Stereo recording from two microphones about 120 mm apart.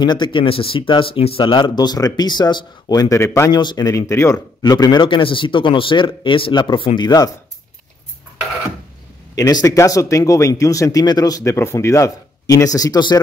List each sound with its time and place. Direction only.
0.0 s speech: 40° left (ahead or behind)
3.2 s speech: 20° left (ahead or behind)
3.5 s speech: 35° left (ahead or behind)
9.4 s speech: 30° left (ahead or behind)